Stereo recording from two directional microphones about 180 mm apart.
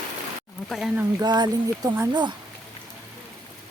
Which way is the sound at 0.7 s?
5° right (ahead or behind).